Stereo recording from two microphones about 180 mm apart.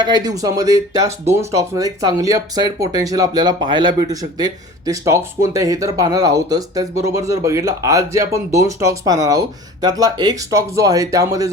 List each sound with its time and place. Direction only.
0.0 s speech: 20° right (ahead or behind)